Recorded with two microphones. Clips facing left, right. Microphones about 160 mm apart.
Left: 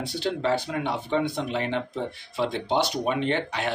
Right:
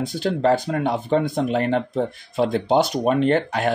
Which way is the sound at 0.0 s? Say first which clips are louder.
Right 6 dB; 45° right (ahead or behind).